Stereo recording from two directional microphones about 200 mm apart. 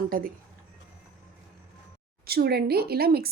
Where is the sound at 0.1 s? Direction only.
45° right (ahead or behind).